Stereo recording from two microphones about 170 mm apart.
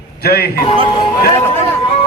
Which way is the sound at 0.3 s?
65° left (ahead or behind).